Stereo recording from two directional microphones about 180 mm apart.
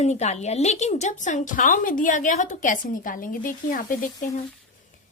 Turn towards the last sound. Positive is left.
turn(degrees=45)  # may be behind; listen again after turning